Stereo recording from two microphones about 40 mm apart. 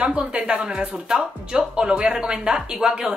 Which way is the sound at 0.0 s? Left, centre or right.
Right.